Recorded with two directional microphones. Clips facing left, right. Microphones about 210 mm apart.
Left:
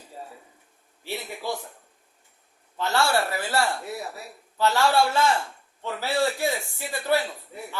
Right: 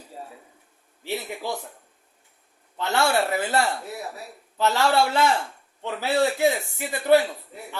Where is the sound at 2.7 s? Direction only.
20° right (ahead or behind).